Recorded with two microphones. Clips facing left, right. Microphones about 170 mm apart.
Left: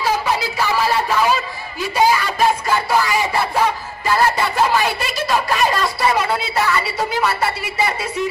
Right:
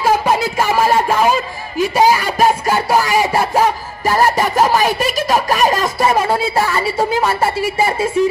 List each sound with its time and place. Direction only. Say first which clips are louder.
0.0 s a sound: right 5 dB; 45° right (ahead or behind)
2.0 s music: right 2 dB; 40° right (ahead or behind)
6.7 s a woman's voice: right 4 dB; 30° right (ahead or behind)
7.4 s speech: right 5 dB; 50° right (ahead or behind)